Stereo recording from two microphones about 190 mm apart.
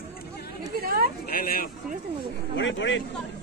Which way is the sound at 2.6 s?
75° left (ahead or behind).